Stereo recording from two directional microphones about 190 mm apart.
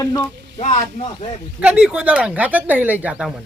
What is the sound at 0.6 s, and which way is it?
Speech, 35° left (ahead or behind).